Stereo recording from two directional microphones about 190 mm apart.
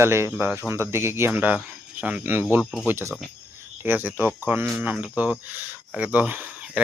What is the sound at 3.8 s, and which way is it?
Speech, 10° right (ahead or behind).